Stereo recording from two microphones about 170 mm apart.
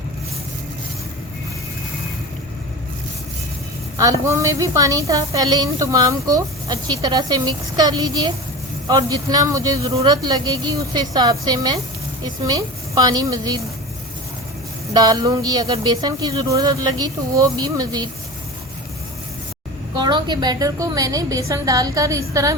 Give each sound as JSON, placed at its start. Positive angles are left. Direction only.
{"t": 3.9, "sound": "a woman's voice", "side_deg": -20}
{"t": 14.9, "sound": "a woman's voice", "side_deg": -25}
{"t": 20.0, "sound": "a woman's voice", "side_deg": -25}